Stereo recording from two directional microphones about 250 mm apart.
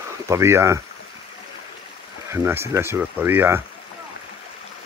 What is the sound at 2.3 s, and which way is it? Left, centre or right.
Speech, centre.